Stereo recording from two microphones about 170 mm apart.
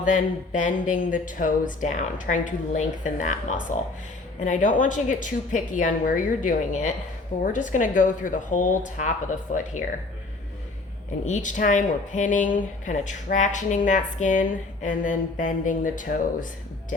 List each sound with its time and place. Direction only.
0.0 s speech: 50° left (ahead or behind)
11.3 s speech: 50° left (ahead or behind)